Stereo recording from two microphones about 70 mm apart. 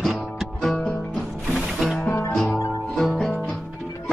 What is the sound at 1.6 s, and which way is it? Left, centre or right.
Music, centre.